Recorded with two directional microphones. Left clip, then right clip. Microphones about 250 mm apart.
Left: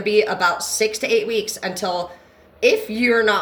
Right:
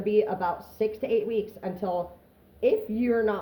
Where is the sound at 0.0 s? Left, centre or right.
Centre.